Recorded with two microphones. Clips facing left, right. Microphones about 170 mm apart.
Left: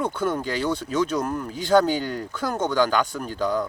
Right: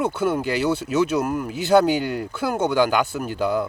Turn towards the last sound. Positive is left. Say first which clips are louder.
# right 2 dB
turn(degrees=-10)  # may be behind; listen again after turning